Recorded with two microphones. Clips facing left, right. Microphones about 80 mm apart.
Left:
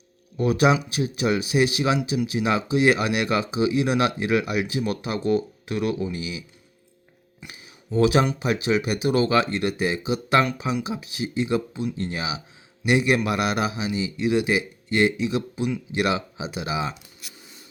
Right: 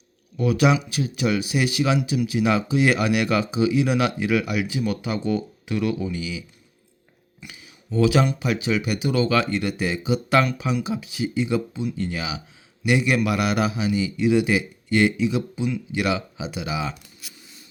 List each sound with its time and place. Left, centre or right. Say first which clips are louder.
0.3 s speech: even; left
7.4 s speech: even; left